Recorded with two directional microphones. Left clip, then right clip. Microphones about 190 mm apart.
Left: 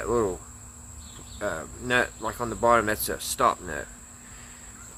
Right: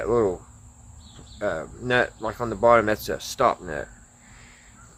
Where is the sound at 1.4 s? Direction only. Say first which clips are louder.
Right 4 dB; 15° right (ahead or behind).